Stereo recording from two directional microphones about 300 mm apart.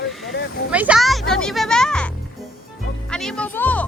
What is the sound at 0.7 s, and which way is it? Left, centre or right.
Speech, centre.